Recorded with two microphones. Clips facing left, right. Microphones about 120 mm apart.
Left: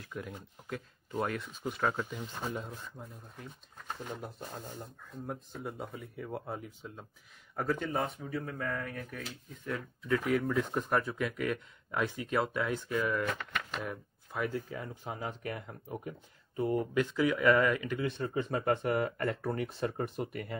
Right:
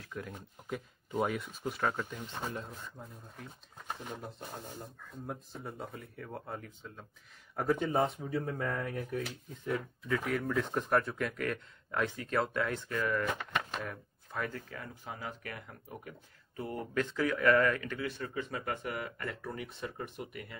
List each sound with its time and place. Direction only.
0.0 s speech: centre (ahead or behind)
5.2 s speech: centre (ahead or behind)
7.5 s speech: 10° right (ahead or behind)
7.9 s speech: 25° right (ahead or behind)
10.0 s speech: centre (ahead or behind)
13.5 s a sound: 30° right (ahead or behind)
13.8 s speech: 10° left (ahead or behind)
16.9 s speech: 10° left (ahead or behind); by 20.5 s 40° left (ahead or behind)